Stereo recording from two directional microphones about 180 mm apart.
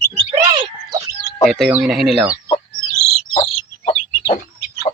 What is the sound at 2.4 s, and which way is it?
Chicken, 25° left (ahead or behind).